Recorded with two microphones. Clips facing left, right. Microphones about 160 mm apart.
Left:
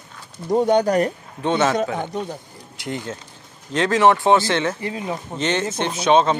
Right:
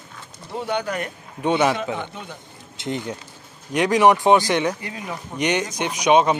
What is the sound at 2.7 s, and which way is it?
Speech, 20° right (ahead or behind).